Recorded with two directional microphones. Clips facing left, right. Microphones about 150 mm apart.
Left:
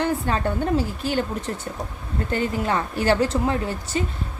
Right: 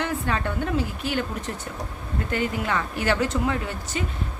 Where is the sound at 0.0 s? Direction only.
35° left (ahead or behind).